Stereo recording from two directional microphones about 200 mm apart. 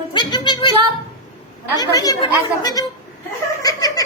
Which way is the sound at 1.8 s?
20° left (ahead or behind).